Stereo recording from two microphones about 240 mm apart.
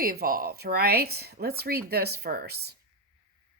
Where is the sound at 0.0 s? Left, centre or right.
Right.